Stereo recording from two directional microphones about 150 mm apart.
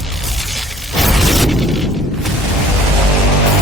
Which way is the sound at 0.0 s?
Centre (ahead or behind).